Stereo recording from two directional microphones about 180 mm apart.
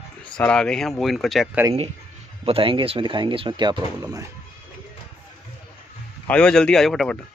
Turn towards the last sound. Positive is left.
turn(degrees=0)  # may be behind; listen again after turning